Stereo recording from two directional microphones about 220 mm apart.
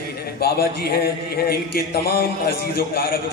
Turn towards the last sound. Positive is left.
turn(degrees=40)  # may be behind; listen again after turning